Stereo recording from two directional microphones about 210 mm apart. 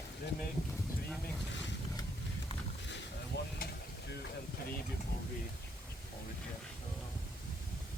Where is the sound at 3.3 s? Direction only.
55° left (ahead or behind).